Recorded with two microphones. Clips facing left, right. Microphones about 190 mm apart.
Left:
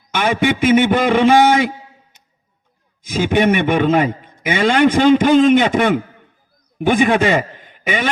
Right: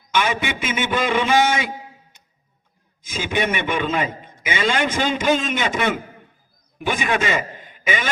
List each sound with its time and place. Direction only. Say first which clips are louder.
0.1 s a man's voice: left 5 dB; 55° left (ahead or behind)
3.0 s a man's voice: left 8 dB; 55° left (ahead or behind)